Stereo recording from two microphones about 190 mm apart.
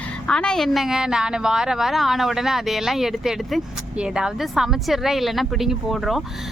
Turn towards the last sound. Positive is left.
turn(degrees=0)  # may be behind; listen again after turning